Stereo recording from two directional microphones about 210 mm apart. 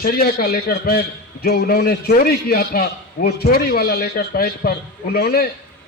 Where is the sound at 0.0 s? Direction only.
45° left (ahead or behind).